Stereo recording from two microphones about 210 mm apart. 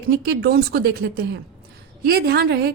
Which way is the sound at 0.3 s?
50° right (ahead or behind).